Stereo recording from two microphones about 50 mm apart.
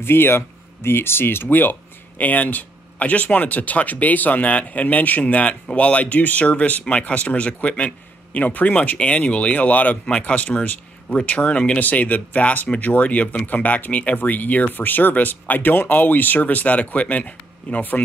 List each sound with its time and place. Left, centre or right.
0.0 s speech: left